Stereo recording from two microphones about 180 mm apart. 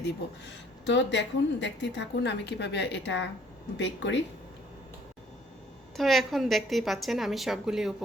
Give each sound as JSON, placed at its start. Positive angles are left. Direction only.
{"t": 0.0, "sound": "speech", "side_deg": 75}
{"t": 6.0, "sound": "a woman's voice", "side_deg": 0}